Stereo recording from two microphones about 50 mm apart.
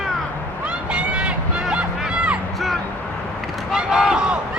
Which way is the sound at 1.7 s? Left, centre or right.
Centre.